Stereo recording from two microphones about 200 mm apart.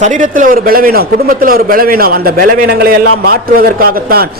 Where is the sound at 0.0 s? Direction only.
40° right (ahead or behind).